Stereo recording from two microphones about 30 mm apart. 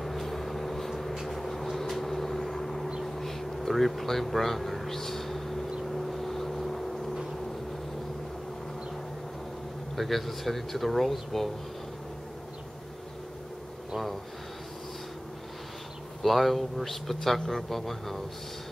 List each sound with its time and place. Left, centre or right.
0.0 s vehicle: centre
3.0 s a sound: centre
5.9 s vehicle: centre
9.9 s a man's voice: centre
16.2 s a man's voice: centre